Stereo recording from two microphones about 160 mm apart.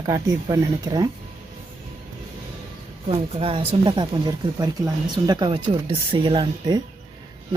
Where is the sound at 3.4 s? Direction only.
35° right (ahead or behind).